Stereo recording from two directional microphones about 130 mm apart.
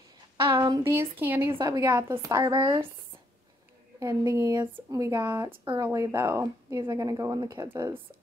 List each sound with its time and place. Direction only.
0.5 s a sound: 40° right (ahead or behind)
0.8 s speech: 20° right (ahead or behind)
1.5 s a woman's voice: 35° right (ahead or behind)
4.0 s speech: 25° right (ahead or behind)